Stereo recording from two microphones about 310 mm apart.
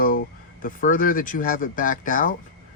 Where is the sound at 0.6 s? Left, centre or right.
Left.